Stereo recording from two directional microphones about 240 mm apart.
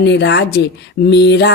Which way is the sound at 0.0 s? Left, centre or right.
Left.